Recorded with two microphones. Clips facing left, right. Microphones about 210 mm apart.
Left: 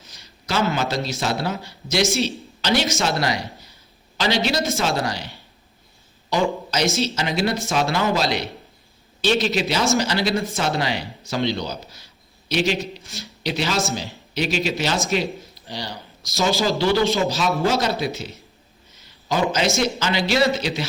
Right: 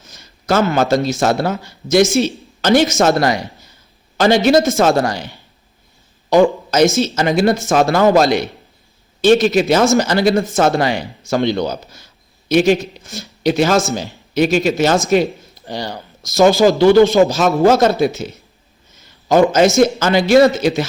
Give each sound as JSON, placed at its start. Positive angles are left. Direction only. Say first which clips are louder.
{"t": 0.0, "sound": "a man's voice", "louder": "right 6 dB", "side_deg": -50}
{"t": 6.3, "sound": "speech", "louder": "right 10 dB", "side_deg": -50}
{"t": 18.9, "sound": "a sound", "louder": "right 11 dB", "side_deg": -50}
{"t": 19.8, "sound": "speech", "louder": "right 9 dB", "side_deg": -50}